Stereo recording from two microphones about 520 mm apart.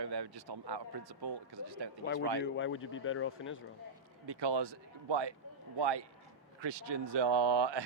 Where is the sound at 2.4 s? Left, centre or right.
Left.